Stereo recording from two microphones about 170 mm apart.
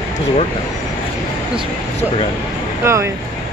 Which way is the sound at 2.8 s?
15° right (ahead or behind).